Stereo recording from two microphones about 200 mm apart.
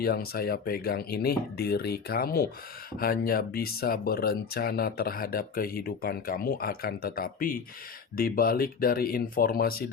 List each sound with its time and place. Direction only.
0.0 s speech: 50° left (ahead or behind)